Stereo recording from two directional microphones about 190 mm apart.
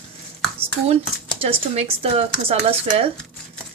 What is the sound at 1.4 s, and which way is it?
A woman's voice, 30° right (ahead or behind).